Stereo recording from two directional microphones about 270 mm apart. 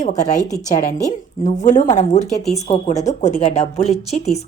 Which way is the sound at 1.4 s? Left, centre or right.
Left.